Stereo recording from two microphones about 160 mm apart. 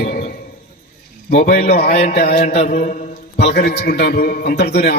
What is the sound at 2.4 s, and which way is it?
Mantra, 50° left (ahead or behind).